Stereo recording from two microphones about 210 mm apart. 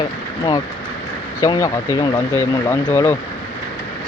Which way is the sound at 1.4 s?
15° left (ahead or behind).